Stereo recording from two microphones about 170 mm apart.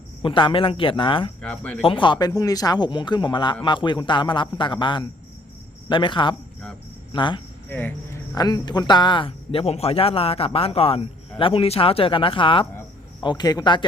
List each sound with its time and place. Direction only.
0.2 s speech: 30° left (ahead or behind)
1.4 s speech: 5° left (ahead or behind)
1.8 s speech: 30° left (ahead or behind)
7.7 s speech: 10° left (ahead or behind)
8.4 s a man's voice: 25° left (ahead or behind)